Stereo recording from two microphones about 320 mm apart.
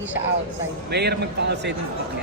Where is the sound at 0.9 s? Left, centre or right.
Right.